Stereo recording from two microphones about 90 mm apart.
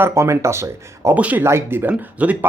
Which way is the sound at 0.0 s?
30° right (ahead or behind).